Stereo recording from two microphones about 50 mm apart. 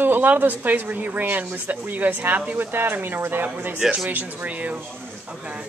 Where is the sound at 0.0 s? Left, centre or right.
Right.